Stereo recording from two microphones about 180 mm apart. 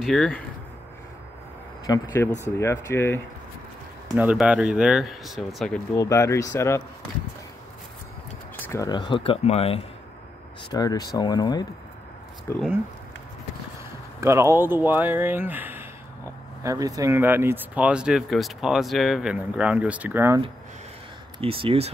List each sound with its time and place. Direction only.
0.0 s speech: 5° left (ahead or behind)
1.9 s speech: 20° left (ahead or behind)
4.1 s speech: 5° right (ahead or behind)
5.9 s speech: 15° left (ahead or behind)
8.5 s a sound: 10° left (ahead or behind)
8.8 s speech: 25° left (ahead or behind)
10.7 s speech: 20° left (ahead or behind)
14.2 s speech: 15° right (ahead or behind)
21.4 s speech: 30° right (ahead or behind)